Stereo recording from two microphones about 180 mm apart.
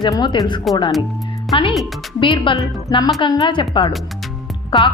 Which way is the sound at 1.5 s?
30° left (ahead or behind).